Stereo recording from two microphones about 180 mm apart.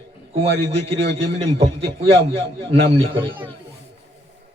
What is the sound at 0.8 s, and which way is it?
A man's voice, 35° right (ahead or behind).